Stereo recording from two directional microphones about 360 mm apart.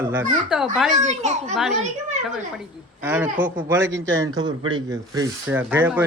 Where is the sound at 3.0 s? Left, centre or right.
Centre.